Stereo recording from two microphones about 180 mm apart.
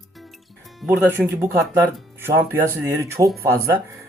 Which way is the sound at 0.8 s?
10° right (ahead or behind).